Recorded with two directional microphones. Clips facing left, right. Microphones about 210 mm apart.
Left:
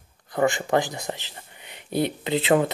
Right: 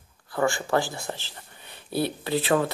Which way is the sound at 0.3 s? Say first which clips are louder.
Left 2 dB; 20° left (ahead or behind).